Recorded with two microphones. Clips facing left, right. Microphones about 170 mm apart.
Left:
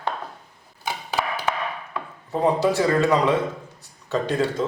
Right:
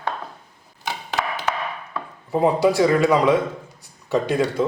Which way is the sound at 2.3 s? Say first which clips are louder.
Right 3 dB; 10° right (ahead or behind).